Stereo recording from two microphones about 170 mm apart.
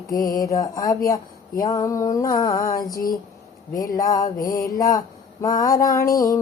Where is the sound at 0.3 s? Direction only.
20° left (ahead or behind).